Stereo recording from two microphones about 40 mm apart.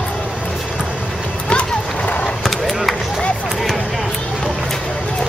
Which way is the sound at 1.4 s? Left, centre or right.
Left.